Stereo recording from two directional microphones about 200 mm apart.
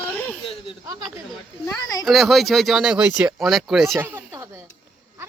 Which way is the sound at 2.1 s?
Centre (ahead or behind).